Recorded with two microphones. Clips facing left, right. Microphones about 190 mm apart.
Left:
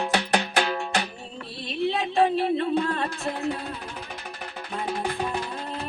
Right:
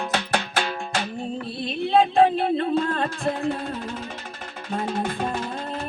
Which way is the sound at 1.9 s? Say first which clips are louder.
Right 7 dB; 55° right (ahead or behind).